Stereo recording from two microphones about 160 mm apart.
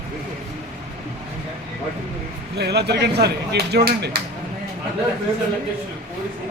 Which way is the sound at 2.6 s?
90° right.